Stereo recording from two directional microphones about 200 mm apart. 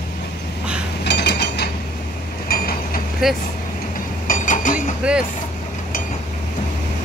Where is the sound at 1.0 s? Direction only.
55° left (ahead or behind).